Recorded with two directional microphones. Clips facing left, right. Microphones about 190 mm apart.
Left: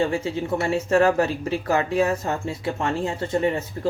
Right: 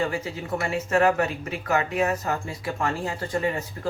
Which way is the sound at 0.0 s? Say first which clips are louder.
Left 5 dB; 25° left (ahead or behind).